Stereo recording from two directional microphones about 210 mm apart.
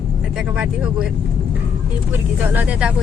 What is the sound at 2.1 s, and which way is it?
Speech, 10° right (ahead or behind).